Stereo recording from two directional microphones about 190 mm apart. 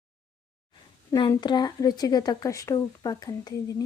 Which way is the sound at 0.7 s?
20° left (ahead or behind).